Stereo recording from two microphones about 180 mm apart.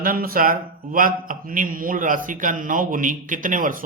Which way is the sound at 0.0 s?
55° right (ahead or behind).